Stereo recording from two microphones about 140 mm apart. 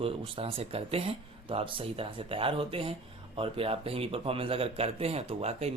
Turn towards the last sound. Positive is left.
turn(degrees=-45)  # may be behind; listen again after turning